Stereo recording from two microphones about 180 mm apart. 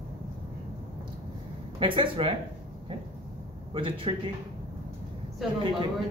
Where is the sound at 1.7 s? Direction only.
30° right (ahead or behind).